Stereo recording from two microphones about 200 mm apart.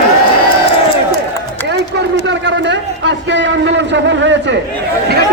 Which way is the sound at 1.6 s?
60° right (ahead or behind).